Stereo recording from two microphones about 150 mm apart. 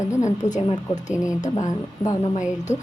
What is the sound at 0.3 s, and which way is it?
A woman's voice, 55° left (ahead or behind).